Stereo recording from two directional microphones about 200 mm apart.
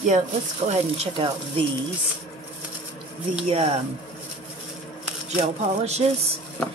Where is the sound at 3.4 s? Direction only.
25° right (ahead or behind).